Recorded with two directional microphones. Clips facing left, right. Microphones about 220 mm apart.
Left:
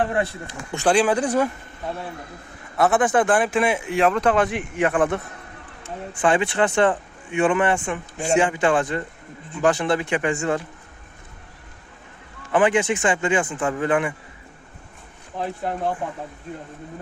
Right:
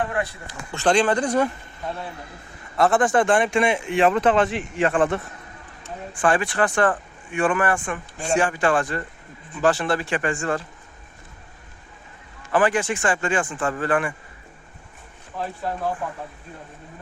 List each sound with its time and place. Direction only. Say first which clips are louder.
0.0 s speech: left 3 dB; 25° left (ahead or behind)
0.7 s speech: left 1 dB; 10° left (ahead or behind)
2.7 s speech: even; centre (ahead or behind)
6.2 s speech: left 1 dB; 20° left (ahead or behind)
12.5 s speech: left 2 dB; 20° left (ahead or behind)
15.4 s speech: left 2 dB; 20° left (ahead or behind)